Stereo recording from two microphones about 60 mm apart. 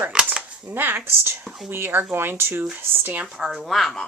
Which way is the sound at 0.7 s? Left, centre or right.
Right.